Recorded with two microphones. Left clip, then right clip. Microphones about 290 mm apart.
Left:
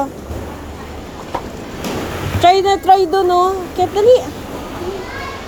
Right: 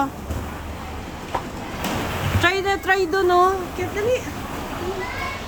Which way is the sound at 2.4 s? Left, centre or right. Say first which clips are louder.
Left 10 dB; centre.